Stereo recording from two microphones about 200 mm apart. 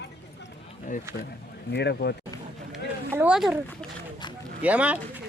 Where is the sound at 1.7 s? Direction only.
55° left (ahead or behind).